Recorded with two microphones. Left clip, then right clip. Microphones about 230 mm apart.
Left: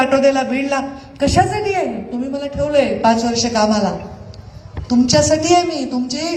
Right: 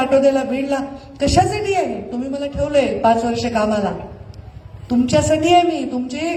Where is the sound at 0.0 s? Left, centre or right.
Right.